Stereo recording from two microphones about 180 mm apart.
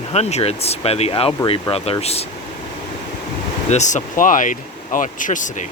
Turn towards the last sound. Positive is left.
turn(degrees=45)  # may be behind; listen again after turning